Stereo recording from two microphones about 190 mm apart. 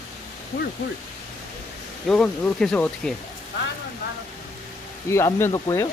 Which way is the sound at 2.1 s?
5° left (ahead or behind).